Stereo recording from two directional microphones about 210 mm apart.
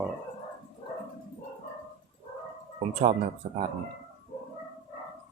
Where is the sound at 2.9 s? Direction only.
30° right (ahead or behind).